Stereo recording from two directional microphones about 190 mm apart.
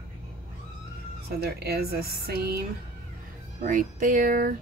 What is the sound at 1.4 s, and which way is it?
Speech, 55° right (ahead or behind).